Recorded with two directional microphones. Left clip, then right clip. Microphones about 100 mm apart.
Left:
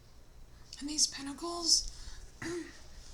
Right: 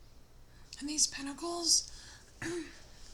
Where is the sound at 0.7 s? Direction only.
30° right (ahead or behind).